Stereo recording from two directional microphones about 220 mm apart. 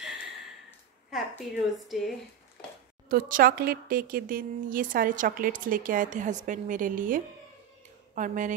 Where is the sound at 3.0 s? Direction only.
40° right (ahead or behind).